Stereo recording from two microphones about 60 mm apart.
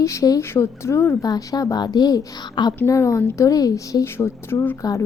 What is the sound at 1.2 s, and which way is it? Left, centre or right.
A woman's voice, left.